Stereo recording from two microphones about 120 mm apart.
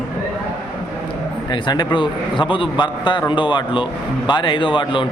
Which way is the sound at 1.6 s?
35° left (ahead or behind).